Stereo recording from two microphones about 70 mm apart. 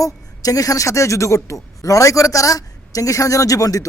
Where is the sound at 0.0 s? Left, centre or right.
Left.